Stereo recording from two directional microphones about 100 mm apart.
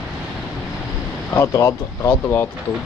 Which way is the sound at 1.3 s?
30° left (ahead or behind).